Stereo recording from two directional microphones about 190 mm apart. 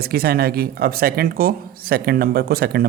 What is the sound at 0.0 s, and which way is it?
Speech, 55° right (ahead or behind).